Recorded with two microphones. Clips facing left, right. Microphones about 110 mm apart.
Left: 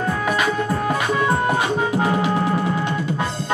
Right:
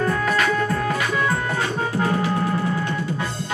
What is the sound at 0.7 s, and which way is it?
Music, 25° left (ahead or behind).